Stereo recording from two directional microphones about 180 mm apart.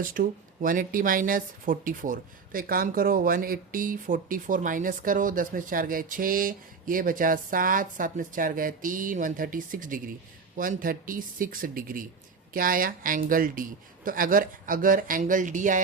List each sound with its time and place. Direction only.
0.0 s speech: 50° right (ahead or behind)